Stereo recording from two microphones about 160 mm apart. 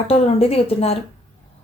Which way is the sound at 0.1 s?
40° left (ahead or behind).